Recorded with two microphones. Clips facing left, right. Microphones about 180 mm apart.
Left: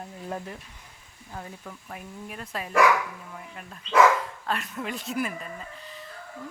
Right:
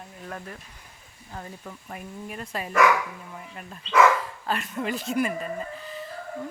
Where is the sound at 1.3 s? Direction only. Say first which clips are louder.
Right 1 dB; centre (ahead or behind).